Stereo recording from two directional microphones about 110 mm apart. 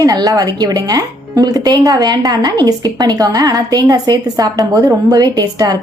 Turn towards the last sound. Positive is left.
turn(degrees=-35)  # may be behind; listen again after turning